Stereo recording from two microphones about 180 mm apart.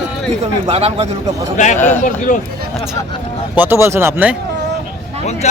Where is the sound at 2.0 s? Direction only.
45° left (ahead or behind).